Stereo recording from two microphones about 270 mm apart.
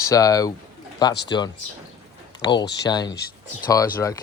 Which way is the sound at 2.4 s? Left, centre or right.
Centre.